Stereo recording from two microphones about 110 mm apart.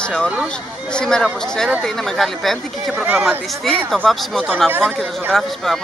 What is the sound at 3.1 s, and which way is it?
Speech, 15° right (ahead or behind).